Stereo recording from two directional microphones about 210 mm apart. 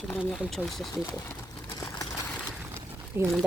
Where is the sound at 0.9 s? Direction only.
15° left (ahead or behind).